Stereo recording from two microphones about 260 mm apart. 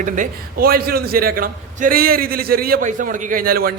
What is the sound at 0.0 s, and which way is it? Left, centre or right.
A man's voice, right.